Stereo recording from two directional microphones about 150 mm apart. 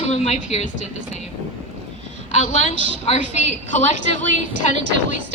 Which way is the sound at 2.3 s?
55° left (ahead or behind).